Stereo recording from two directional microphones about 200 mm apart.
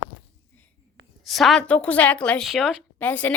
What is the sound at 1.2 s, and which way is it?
A woman's voice, centre (ahead or behind).